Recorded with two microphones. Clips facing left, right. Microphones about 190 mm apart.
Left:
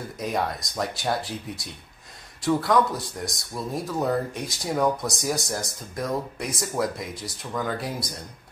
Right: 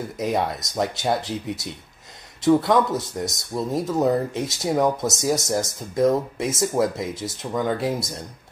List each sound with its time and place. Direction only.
0.2 s speech: 25° right (ahead or behind)